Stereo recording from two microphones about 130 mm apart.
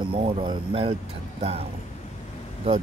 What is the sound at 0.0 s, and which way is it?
Speech, 45° right (ahead or behind).